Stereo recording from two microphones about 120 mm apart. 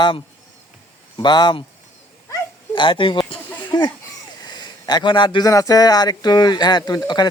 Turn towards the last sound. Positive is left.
turn(degrees=35)  # may be behind; listen again after turning